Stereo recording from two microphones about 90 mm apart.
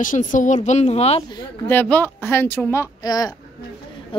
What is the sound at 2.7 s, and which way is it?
Speech, 35° left (ahead or behind).